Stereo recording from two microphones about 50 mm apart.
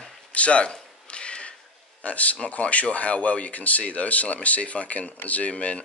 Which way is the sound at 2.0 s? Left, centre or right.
Left.